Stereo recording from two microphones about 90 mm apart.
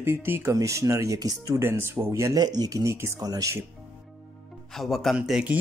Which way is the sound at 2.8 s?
30° right (ahead or behind).